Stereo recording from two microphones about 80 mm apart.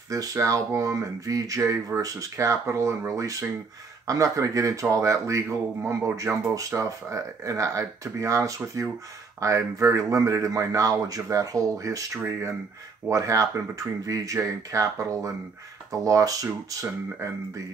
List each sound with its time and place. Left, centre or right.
0.1 s a man's voice: right
12.2 s speech: right
13.1 s a man's voice: right